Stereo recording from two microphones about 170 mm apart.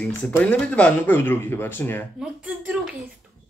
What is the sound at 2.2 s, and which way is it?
Speech, 10° right (ahead or behind).